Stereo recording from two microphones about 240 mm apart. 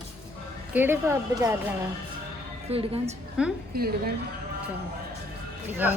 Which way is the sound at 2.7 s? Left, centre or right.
Right.